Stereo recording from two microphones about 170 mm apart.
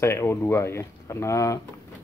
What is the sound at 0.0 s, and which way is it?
Speech, 15° left (ahead or behind).